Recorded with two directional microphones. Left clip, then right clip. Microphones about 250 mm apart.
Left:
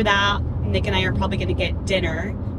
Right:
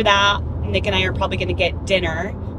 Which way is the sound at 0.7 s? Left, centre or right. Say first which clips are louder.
Right 3 dB; left.